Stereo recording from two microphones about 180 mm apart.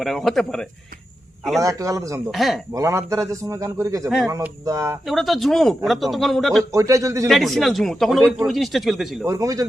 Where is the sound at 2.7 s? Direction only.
20° right (ahead or behind).